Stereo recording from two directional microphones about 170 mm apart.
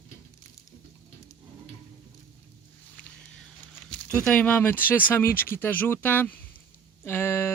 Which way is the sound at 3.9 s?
10° left (ahead or behind).